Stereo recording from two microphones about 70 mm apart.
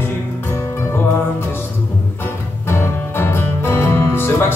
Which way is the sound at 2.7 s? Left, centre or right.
Left.